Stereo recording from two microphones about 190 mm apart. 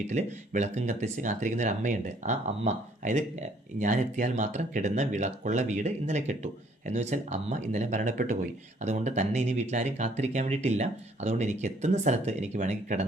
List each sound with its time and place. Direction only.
0.1 s speech: 35° right (ahead or behind)